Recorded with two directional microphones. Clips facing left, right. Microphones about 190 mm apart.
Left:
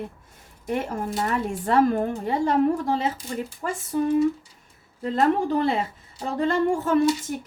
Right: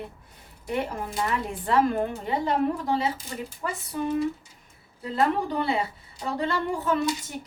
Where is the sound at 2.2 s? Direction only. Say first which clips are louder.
Left 5 dB; 45° left (ahead or behind).